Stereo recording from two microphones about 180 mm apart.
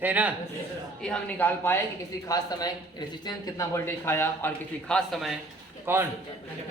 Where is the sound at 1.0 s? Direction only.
10° left (ahead or behind).